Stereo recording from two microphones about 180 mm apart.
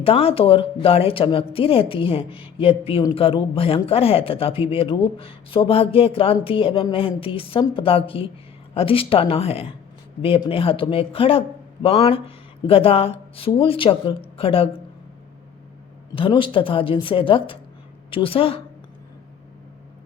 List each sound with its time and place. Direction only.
0.0 s speech: 35° left (ahead or behind)
16.1 s a woman's voice: 30° left (ahead or behind)